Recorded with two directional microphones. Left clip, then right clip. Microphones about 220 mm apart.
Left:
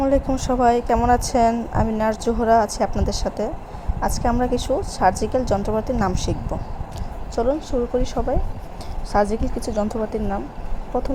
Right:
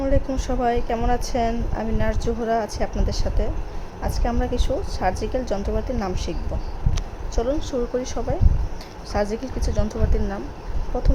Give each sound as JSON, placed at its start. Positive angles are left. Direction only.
{"t": 0.0, "sound": "a woman's voice", "side_deg": 15}
{"t": 7.3, "sound": "a woman's voice", "side_deg": 15}